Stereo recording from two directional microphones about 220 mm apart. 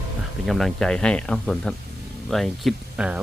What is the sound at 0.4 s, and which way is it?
Speech, centre (ahead or behind).